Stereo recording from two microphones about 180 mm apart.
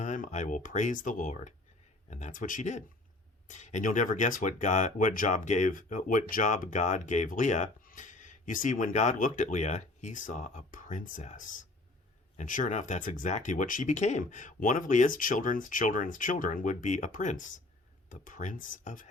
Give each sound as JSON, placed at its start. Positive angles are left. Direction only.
{"t": 0.0, "sound": "speech", "side_deg": 40}